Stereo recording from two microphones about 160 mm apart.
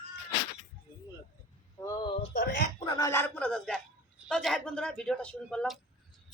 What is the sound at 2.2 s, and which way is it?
Speech, 75° left (ahead or behind).